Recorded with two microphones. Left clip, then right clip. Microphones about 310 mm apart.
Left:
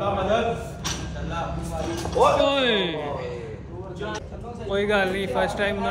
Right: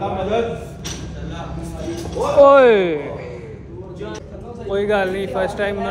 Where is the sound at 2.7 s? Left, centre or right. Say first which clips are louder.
Right 8 dB; left.